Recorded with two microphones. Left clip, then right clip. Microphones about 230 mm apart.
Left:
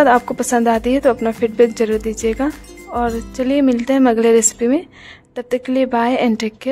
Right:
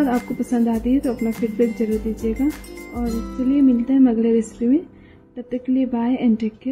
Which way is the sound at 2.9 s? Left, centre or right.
Left.